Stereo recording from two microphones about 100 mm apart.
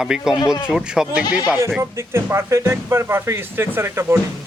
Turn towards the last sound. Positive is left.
turn(degrees=-25)  # may be behind; listen again after turning